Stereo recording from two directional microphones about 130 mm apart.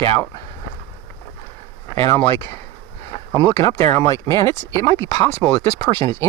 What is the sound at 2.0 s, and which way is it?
Speech, 20° left (ahead or behind).